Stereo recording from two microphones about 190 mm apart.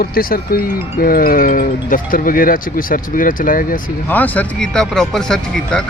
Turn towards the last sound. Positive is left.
turn(degrees=0)  # may be behind; listen again after turning